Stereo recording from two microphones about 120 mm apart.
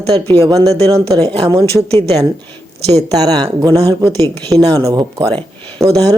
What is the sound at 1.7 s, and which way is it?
Speech, 10° right (ahead or behind).